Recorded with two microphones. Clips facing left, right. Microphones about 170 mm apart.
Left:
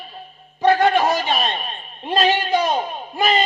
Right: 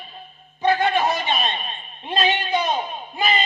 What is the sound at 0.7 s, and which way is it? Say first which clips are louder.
Speech: left 4 dB; 40° left (ahead or behind).